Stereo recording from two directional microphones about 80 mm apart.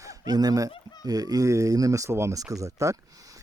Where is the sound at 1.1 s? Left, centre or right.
Right.